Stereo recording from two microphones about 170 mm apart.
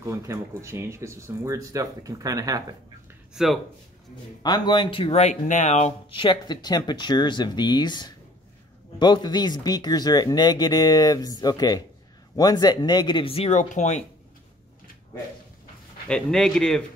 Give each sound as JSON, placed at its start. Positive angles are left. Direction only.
{"t": 0.0, "sound": "speech", "side_deg": -20}
{"t": 3.4, "sound": "speech", "side_deg": 0}
{"t": 4.4, "sound": "speech", "side_deg": 25}
{"t": 16.1, "sound": "speech", "side_deg": 5}